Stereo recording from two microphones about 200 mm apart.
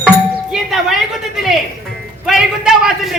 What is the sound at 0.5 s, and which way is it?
Doorbell, centre (ahead or behind).